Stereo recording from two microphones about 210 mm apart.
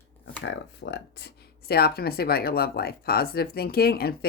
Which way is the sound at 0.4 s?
60° left (ahead or behind).